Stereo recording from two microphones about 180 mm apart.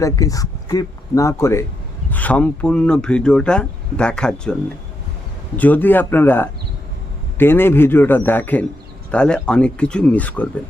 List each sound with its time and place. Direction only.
0.0 s speech: 20° left (ahead or behind)
5.5 s speech: 10° left (ahead or behind)